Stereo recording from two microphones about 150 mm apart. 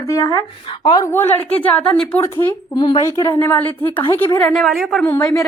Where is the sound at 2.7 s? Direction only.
30° left (ahead or behind); by 5.3 s 10° left (ahead or behind).